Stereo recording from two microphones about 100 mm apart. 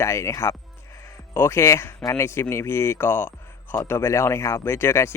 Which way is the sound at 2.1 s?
25° left (ahead or behind).